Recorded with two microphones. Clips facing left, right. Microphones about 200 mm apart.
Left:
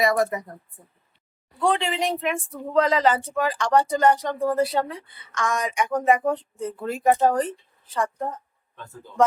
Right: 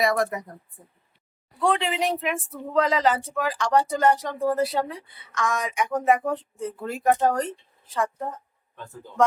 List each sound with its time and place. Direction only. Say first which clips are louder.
0.0 s speech: left 2 dB; centre (ahead or behind)
1.5 s speech: left 1 dB; centre (ahead or behind)